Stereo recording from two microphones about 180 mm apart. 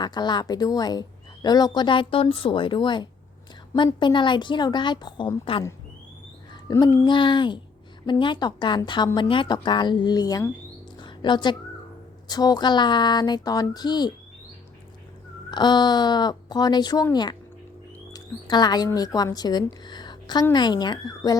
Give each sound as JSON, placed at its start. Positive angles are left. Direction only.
{"t": 0.0, "sound": "speech", "side_deg": 25}
{"t": 6.5, "sound": "a sound", "side_deg": 20}
{"t": 7.0, "sound": "speech", "side_deg": 25}
{"t": 11.0, "sound": "a sound", "side_deg": 25}
{"t": 12.3, "sound": "speech", "side_deg": 20}
{"t": 15.4, "sound": "speech", "side_deg": 25}